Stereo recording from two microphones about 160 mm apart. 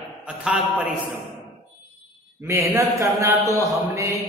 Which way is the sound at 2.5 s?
20° right (ahead or behind).